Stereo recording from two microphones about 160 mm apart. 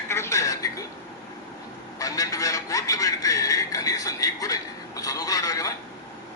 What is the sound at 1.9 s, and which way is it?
A man's voice, 20° left (ahead or behind).